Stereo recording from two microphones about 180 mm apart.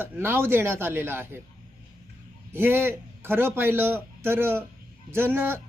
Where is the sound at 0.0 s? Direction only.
10° right (ahead or behind).